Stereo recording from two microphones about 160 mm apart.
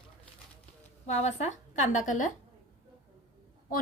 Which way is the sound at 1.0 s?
45° left (ahead or behind).